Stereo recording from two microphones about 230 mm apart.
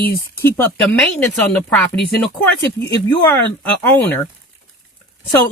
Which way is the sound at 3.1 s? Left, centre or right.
Centre.